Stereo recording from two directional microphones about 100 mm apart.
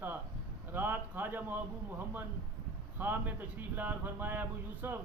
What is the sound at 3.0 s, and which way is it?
A man's voice, 20° right (ahead or behind).